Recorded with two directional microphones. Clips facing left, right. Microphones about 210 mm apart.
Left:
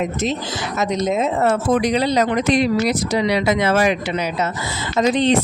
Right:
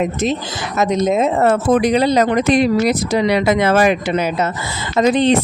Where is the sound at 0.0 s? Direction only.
50° right (ahead or behind).